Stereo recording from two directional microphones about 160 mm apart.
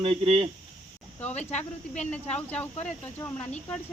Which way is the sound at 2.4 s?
10° left (ahead or behind).